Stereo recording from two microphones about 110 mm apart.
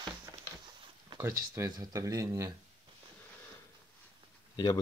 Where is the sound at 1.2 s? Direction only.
25° right (ahead or behind).